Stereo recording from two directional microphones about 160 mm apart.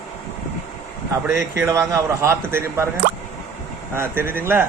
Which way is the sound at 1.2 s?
15° right (ahead or behind).